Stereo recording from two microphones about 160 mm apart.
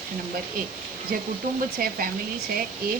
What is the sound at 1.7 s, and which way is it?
Speech, 65° right (ahead or behind).